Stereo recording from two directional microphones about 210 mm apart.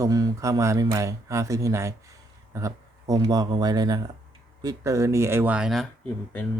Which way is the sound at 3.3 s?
20° right (ahead or behind).